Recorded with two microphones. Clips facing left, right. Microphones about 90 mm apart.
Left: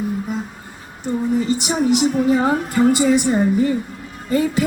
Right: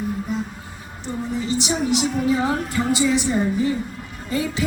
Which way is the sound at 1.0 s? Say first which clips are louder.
Left 7 dB; 50° left (ahead or behind).